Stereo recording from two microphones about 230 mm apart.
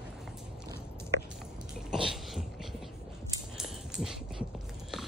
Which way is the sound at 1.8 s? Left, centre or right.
Centre.